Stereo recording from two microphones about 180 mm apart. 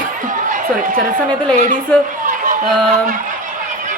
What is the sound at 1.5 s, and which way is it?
Speech, 40° right (ahead or behind).